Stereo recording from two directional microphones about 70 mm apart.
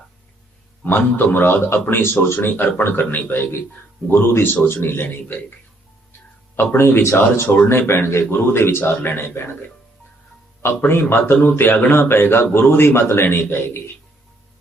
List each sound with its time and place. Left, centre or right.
0.9 s a man's voice: left
6.6 s a man's voice: left